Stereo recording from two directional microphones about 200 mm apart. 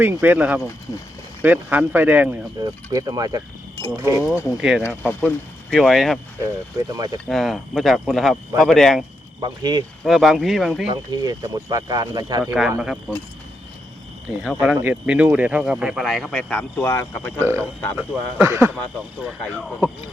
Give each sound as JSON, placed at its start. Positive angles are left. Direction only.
{"t": 0.0, "sound": "speech", "side_deg": -10}
{"t": 2.6, "sound": "speech", "side_deg": -20}
{"t": 4.5, "sound": "speech", "side_deg": -5}
{"t": 6.4, "sound": "speech", "side_deg": -15}
{"t": 7.3, "sound": "speech", "side_deg": 0}
{"t": 9.4, "sound": "speech", "side_deg": -20}
{"t": 10.0, "sound": "speech", "side_deg": 0}
{"t": 10.9, "sound": "speech", "side_deg": -20}
{"t": 12.8, "sound": "speech", "side_deg": 0}
{"t": 14.4, "sound": "speech", "side_deg": -5}
{"t": 17.4, "sound": "speech", "side_deg": -10}